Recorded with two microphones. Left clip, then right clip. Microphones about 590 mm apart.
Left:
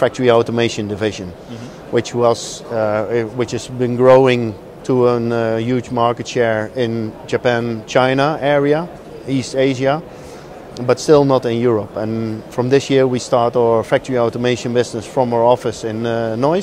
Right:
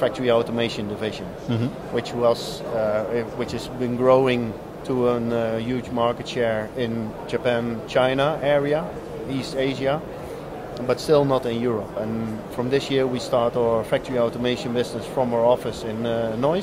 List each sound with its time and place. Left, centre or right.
0.0 s speech: left